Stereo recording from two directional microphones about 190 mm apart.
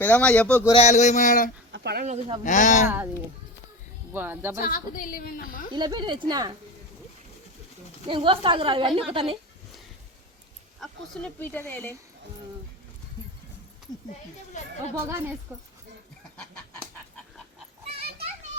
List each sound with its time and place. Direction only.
0.0 s speech: 5° left (ahead or behind)
0.7 s a sound: 35° left (ahead or behind)
1.7 s a sound: 60° right (ahead or behind)
2.0 s speech: 30° right (ahead or behind)
2.4 s a sound: 40° left (ahead or behind)
2.8 s speech: 10° right (ahead or behind)
4.1 s speech: 10° right (ahead or behind)
4.5 s a woman's voice: 45° left (ahead or behind)
5.7 s speech: 20° right (ahead or behind)
8.0 s speech: 25° right (ahead or behind)
10.8 s speech: 5° left (ahead or behind)
14.9 s speech: 15° right (ahead or behind)